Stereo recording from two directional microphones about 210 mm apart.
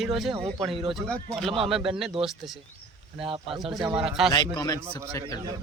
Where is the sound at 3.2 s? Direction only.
25° right (ahead or behind).